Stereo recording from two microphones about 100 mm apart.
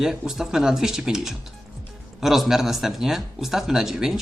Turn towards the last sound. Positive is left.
turn(degrees=-5)  # may be behind; listen again after turning